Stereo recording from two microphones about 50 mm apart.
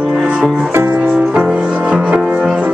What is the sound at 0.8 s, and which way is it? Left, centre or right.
Music, right.